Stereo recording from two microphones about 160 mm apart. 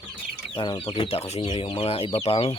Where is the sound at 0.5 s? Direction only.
30° left (ahead or behind).